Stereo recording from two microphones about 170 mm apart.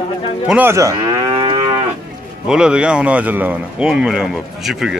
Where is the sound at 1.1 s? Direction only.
30° right (ahead or behind).